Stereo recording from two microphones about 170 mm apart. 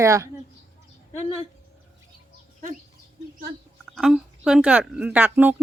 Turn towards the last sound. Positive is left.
turn(degrees=-10)  # may be behind; listen again after turning